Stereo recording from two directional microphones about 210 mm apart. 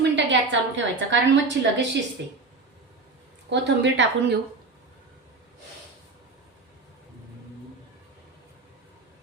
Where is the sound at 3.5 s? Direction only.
55° right (ahead or behind).